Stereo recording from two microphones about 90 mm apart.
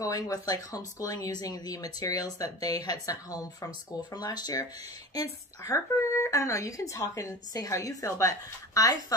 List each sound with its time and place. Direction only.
0.0 s speech: 45° left (ahead or behind)
5.6 s speech: 35° left (ahead or behind)